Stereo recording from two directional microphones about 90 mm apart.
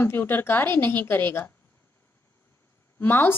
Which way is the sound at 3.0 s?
25° left (ahead or behind).